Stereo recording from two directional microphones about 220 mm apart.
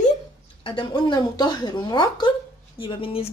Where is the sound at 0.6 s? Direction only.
20° left (ahead or behind).